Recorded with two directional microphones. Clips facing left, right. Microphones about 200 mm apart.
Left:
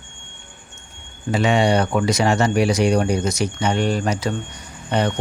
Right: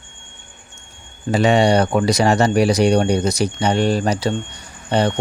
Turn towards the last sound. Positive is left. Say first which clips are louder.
# right 3 dB
turn(degrees=-30)  # may be behind; listen again after turning